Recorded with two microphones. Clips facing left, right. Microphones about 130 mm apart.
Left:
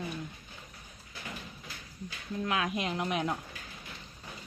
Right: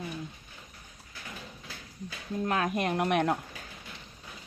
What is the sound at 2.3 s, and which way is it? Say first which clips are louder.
Speech: right 3 dB; 40° right (ahead or behind).